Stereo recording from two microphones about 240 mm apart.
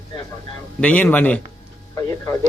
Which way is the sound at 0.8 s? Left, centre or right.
Centre.